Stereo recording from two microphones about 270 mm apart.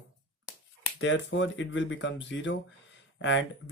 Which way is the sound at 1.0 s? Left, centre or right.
Left.